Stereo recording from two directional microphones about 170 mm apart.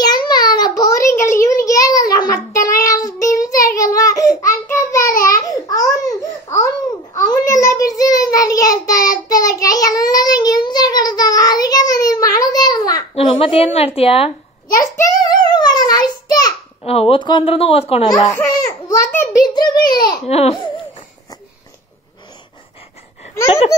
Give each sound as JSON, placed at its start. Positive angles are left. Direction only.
{"t": 0.0, "sound": "a sound", "side_deg": 25}
{"t": 5.4, "sound": "babbling", "side_deg": 20}
{"t": 7.2, "sound": "child singing", "side_deg": 20}
{"t": 13.1, "sound": "a woman's voice", "side_deg": 35}
{"t": 14.7, "sound": "child singing", "side_deg": 20}
{"t": 16.8, "sound": "a woman's voice", "side_deg": 35}
{"t": 18.0, "sound": "speech", "side_deg": 20}
{"t": 19.1, "sound": "a sound", "side_deg": 25}
{"t": 20.2, "sound": "speech", "side_deg": 40}